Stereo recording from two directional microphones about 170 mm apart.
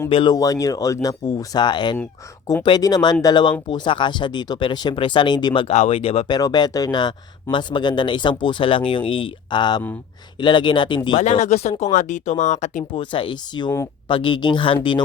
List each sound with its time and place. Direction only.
0.1 s speech: 30° left (ahead or behind)
0.3 s speech: 20° left (ahead or behind)
11.2 s speech: 45° left (ahead or behind)
13.0 s speech: 30° left (ahead or behind)